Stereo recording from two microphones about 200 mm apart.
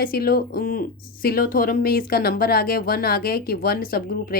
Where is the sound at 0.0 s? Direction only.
50° left (ahead or behind).